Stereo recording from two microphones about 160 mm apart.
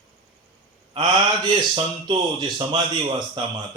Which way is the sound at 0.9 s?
30° right (ahead or behind).